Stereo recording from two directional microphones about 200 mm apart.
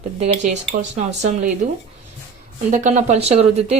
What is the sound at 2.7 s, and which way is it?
Speech, 35° right (ahead or behind).